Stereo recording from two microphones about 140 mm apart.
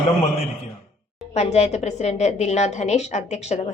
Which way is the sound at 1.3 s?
55° left (ahead or behind).